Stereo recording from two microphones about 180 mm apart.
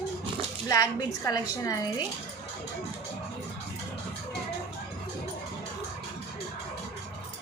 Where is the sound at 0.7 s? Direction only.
20° left (ahead or behind).